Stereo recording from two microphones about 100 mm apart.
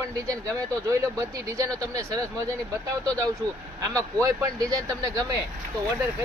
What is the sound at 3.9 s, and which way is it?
Speech, 35° right (ahead or behind).